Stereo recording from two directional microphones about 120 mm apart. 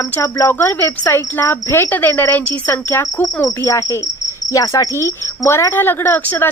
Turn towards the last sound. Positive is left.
turn(degrees=15)  # may be behind; listen again after turning